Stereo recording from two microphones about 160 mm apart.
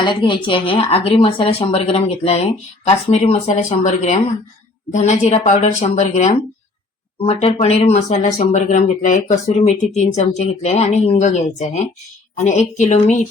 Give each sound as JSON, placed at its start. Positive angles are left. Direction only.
{"t": 0.0, "sound": "a woman's voice", "side_deg": 30}